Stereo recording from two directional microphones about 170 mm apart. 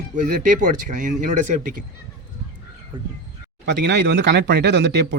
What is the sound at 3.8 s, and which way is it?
Speech, 90° right.